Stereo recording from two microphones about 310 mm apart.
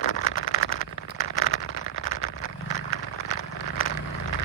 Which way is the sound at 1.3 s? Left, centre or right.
Left.